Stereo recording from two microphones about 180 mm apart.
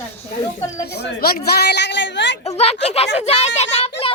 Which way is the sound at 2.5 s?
35° left (ahead or behind).